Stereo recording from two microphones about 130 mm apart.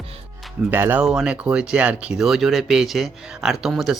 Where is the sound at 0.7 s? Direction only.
15° right (ahead or behind).